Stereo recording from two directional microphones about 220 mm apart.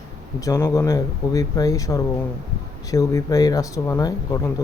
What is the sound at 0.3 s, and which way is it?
Speech, 15° left (ahead or behind).